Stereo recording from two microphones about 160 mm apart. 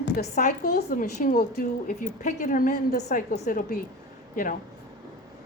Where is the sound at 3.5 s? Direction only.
65° left (ahead or behind).